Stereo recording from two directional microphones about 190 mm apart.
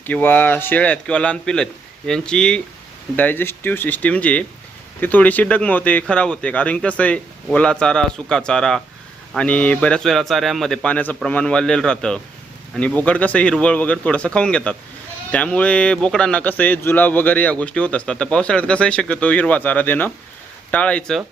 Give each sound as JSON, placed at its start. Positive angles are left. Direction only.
{"t": 0.0, "sound": "a man's voice", "side_deg": 10}